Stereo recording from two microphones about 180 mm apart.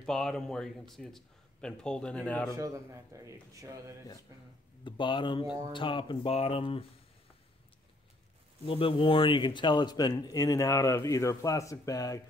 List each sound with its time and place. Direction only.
0.0 s a man's voice: 5° left (ahead or behind)
2.5 s speech: 15° right (ahead or behind)
4.8 s speech: 25° left (ahead or behind)
8.6 s speech: 30° left (ahead or behind)